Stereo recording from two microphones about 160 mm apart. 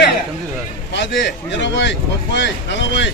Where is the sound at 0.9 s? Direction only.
90° left.